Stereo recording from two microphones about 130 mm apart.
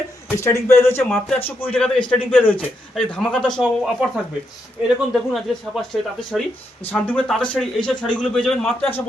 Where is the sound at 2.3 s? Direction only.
15° left (ahead or behind).